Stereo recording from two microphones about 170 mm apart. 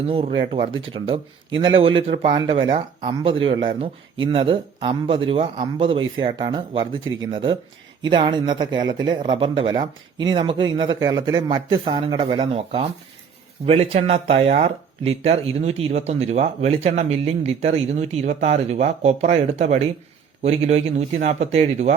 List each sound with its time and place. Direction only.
0.1 s speech: 35° right (ahead or behind)